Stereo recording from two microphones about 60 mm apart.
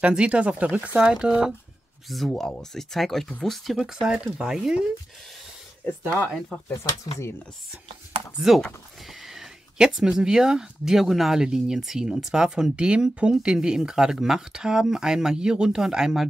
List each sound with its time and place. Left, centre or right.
0.0 s speech: centre
1.1 s speech: centre
2.0 s speech: centre
6.8 s speech: left
8.5 s speech: centre